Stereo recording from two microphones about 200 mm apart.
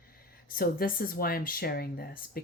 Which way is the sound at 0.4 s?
50° left (ahead or behind).